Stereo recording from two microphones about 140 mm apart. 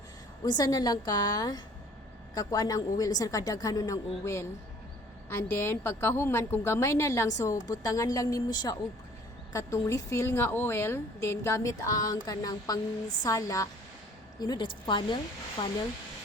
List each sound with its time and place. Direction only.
0.4 s a woman's voice: 25° left (ahead or behind)